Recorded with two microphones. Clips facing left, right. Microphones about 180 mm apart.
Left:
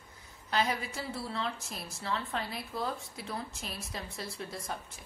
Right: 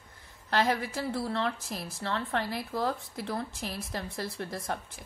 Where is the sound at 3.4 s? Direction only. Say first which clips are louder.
Right 5 dB; 55° right (ahead or behind).